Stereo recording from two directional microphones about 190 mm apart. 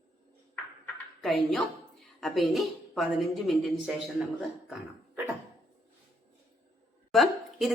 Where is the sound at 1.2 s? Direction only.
Centre (ahead or behind).